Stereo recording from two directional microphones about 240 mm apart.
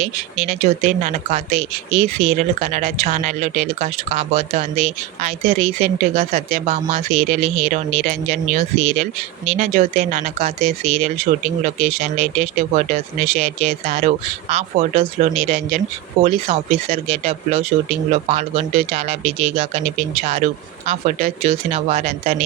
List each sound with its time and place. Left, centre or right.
0.0 s speech: right